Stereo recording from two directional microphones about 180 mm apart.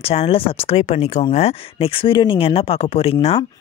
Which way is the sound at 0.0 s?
35° left (ahead or behind).